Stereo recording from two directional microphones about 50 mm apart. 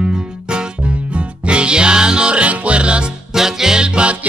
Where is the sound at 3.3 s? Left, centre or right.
Centre.